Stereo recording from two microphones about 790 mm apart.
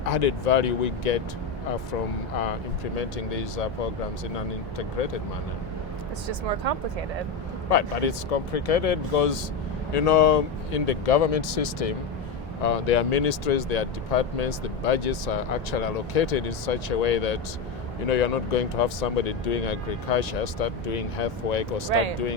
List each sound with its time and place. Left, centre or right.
0.0 s speech: left
2.4 s speech: left
4.8 s speech: left
6.6 s speech: right
7.7 s speech: left
12.6 s speech: left